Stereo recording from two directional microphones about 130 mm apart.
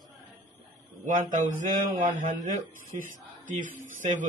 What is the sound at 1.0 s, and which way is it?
A man's voice, 80° right.